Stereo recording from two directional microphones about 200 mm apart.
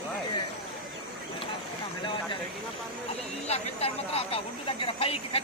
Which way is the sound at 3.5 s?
30° left (ahead or behind).